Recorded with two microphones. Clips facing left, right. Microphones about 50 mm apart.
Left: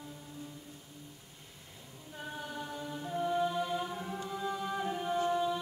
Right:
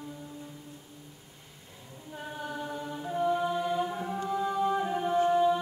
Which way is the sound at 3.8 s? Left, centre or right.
Centre.